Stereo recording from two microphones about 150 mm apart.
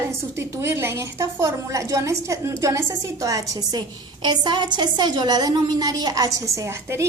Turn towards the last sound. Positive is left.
turn(degrees=-20)  # may be behind; listen again after turning